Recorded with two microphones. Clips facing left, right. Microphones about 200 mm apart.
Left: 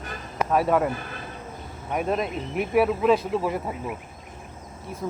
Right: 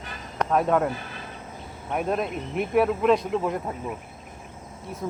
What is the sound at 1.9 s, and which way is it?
Speech, centre (ahead or behind).